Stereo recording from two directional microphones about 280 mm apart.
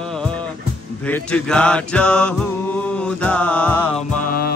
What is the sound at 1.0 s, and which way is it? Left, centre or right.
Mantra, centre.